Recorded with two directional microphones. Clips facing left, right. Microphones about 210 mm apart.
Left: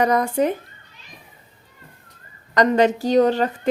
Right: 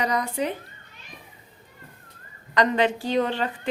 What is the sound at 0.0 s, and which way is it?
Speech, 50° left (ahead or behind).